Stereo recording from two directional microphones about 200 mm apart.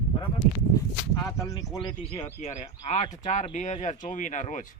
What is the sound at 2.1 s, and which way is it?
Speech, 30° left (ahead or behind).